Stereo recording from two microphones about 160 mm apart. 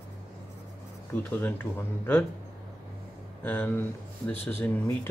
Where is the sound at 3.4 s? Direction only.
10° left (ahead or behind).